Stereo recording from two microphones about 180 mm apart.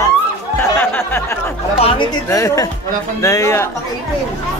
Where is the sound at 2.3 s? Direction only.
15° left (ahead or behind).